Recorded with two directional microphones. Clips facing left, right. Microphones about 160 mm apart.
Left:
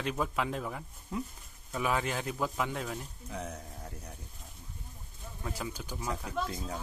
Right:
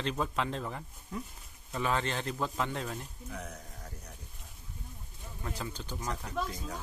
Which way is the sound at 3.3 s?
30° left (ahead or behind).